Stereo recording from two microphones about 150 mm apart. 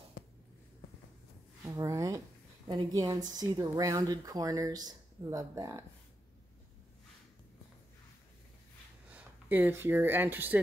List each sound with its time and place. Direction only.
1.6 s speech: 20° right (ahead or behind)
9.1 s speech: 10° right (ahead or behind)